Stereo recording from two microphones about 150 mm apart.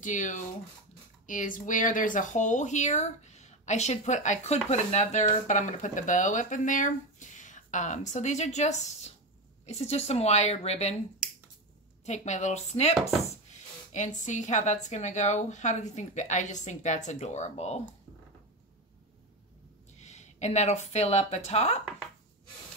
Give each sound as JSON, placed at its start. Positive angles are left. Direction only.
{"t": 0.0, "sound": "speech", "side_deg": 55}
{"t": 12.1, "sound": "speech", "side_deg": 50}
{"t": 13.9, "sound": "speech", "side_deg": 55}
{"t": 20.0, "sound": "speech", "side_deg": 50}